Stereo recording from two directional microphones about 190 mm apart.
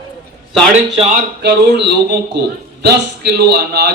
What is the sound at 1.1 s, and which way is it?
A man's voice, 55° right (ahead or behind).